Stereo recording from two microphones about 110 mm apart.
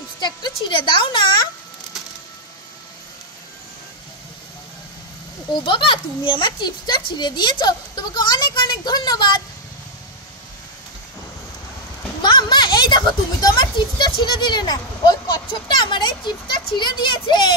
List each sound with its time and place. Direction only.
0.2 s speech: 45° left (ahead or behind)
5.5 s speech: 50° left (ahead or behind)
12.2 s speech: 45° left (ahead or behind)